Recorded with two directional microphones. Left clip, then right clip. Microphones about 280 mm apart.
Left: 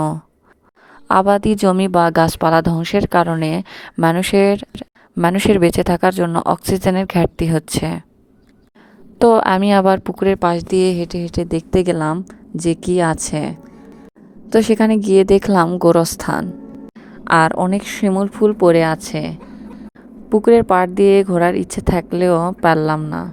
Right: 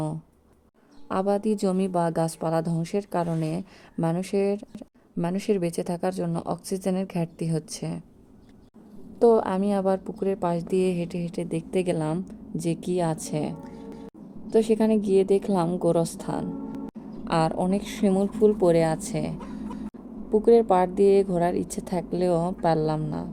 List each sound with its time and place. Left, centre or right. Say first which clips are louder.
1.0 s a woman's voice: left 12 dB; left
9.1 s a woman's voice: left 8 dB; left